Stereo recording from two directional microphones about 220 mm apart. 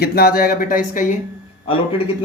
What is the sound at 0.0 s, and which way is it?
Speech, 45° left (ahead or behind).